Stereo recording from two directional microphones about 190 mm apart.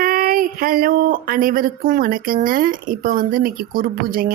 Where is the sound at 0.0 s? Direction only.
50° right (ahead or behind).